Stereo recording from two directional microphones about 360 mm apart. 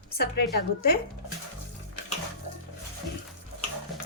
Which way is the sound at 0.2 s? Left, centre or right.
Left.